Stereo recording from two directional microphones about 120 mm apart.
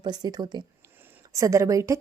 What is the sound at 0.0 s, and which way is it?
A woman's voice, 35° right (ahead or behind).